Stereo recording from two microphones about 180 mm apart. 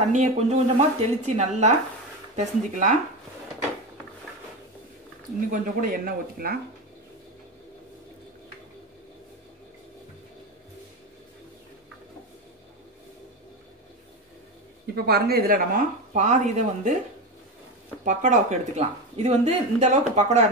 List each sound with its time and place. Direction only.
0.1 s speech: 40° right (ahead or behind)
5.5 s speech: 50° right (ahead or behind)
15.0 s speech: 60° right (ahead or behind); by 17.0 s 40° right (ahead or behind)
18.0 s speech: 40° right (ahead or behind)